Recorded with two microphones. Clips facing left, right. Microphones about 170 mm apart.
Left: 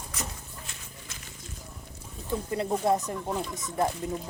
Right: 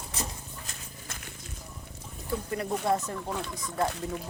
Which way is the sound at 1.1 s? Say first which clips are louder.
Right 6 dB; 55° right (ahead or behind).